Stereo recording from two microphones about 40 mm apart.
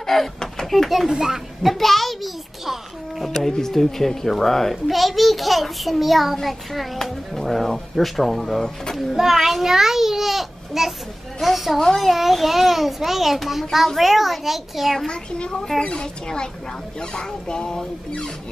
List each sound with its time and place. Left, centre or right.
0.0 s a child's voice: centre
1.0 s a child's voice: centre
1.6 s a child's voice: centre
3.3 s a child's voice: centre
9.1 s a child's voice: centre
15.0 s speech: left